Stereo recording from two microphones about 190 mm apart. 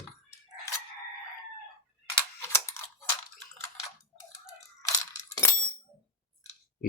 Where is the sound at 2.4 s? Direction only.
15° left (ahead or behind).